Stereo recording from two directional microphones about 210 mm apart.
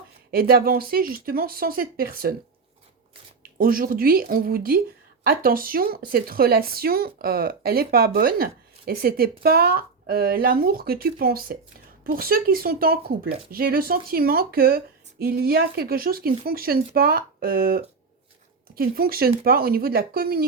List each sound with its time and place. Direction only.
0.3 s speech: 45° right (ahead or behind)
3.6 s speech: 45° right (ahead or behind)